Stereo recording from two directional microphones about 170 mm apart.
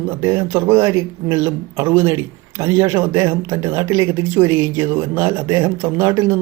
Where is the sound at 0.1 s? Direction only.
15° right (ahead or behind).